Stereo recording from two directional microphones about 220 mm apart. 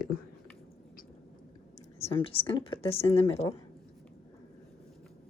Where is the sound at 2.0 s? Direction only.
25° left (ahead or behind).